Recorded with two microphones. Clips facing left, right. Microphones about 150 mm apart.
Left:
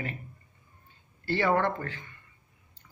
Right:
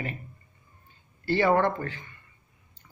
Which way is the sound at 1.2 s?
15° right (ahead or behind).